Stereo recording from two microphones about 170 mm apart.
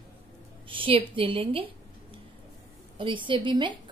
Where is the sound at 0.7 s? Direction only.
30° right (ahead or behind).